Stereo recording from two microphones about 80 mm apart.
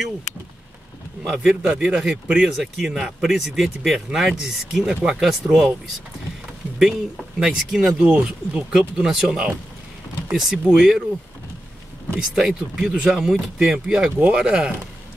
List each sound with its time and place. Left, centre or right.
1.3 s speech: centre
2.4 s speech: centre
6.8 s speech: centre
12.2 s speech: centre